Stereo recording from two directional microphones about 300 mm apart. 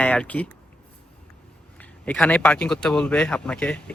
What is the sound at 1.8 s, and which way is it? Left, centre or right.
A man's voice, centre.